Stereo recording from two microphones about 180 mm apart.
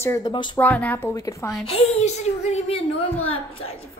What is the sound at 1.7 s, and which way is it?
A woman's voice, 40° left (ahead or behind).